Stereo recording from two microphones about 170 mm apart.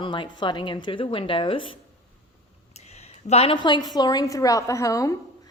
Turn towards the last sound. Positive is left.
turn(degrees=20)  # may be behind; listen again after turning